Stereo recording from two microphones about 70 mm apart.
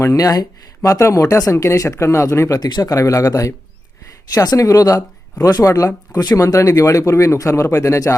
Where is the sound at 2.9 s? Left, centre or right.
Left.